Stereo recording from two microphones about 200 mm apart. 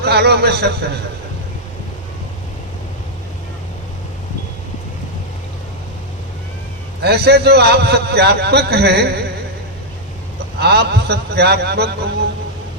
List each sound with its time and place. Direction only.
0.0 s a man's voice: 55° right (ahead or behind)
7.0 s a man's voice: 55° right (ahead or behind)
10.6 s a man's voice: 55° right (ahead or behind)